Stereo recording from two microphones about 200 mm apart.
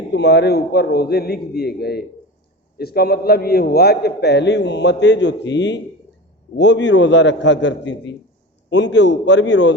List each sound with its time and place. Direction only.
0.1 s a man's voice: 55° left (ahead or behind)